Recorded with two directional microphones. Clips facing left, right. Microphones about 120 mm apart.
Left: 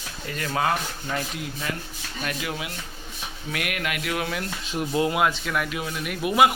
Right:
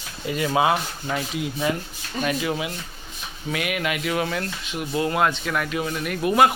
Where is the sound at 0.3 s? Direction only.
10° right (ahead or behind).